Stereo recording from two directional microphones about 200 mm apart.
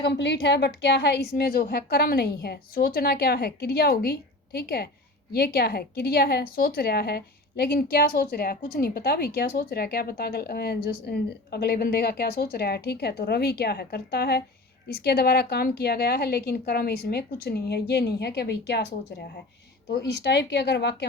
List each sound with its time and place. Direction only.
0.0 s speech: 60° left (ahead or behind)